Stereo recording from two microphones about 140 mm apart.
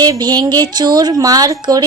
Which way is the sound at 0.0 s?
30° right (ahead or behind).